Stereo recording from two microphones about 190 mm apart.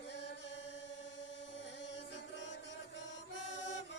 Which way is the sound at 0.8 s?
70° left (ahead or behind).